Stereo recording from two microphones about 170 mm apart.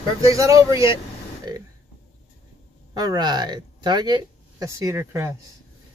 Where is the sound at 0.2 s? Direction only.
20° right (ahead or behind).